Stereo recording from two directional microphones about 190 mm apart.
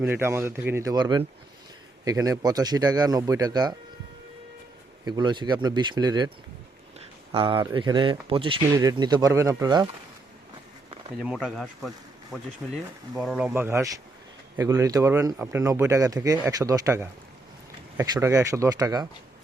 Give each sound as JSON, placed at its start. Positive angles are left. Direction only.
{"t": 0.0, "sound": "speech", "side_deg": -10}
{"t": 5.0, "sound": "speech", "side_deg": -20}
{"t": 7.3, "sound": "speech", "side_deg": -25}
{"t": 11.2, "sound": "speech", "side_deg": 0}